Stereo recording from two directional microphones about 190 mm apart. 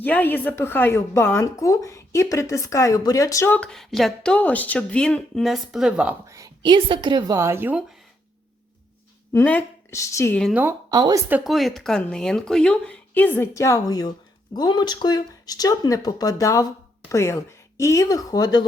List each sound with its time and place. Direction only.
0.0 s a woman's voice: 10° left (ahead or behind); by 7.9 s 10° right (ahead or behind)
9.3 s a woman's voice: 10° left (ahead or behind)
10.4 s a woman's voice: 10° right (ahead or behind)
10.9 s speech: 20° right (ahead or behind)
11.3 s a woman's voice: 5° right (ahead or behind); by 18.6 s 20° left (ahead or behind)